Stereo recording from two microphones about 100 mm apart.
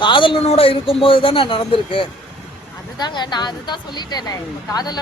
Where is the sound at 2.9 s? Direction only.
45° left (ahead or behind).